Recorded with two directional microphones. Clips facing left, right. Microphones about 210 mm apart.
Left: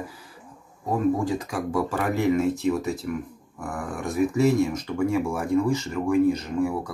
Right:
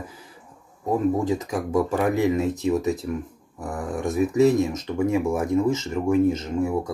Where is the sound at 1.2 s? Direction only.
20° right (ahead or behind).